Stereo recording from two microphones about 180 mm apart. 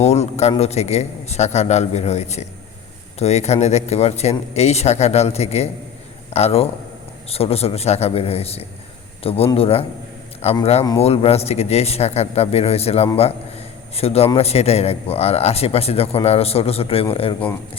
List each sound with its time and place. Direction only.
0.0 s speech: 35° left (ahead or behind)
13.1 s a sound: 35° left (ahead or behind)
14.3 s speech: 35° left (ahead or behind)